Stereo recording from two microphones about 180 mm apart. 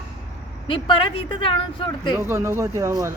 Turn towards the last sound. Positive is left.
turn(degrees=-15)  # may be behind; listen again after turning